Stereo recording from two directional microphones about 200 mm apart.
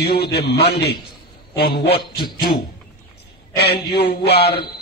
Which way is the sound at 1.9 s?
25° left (ahead or behind).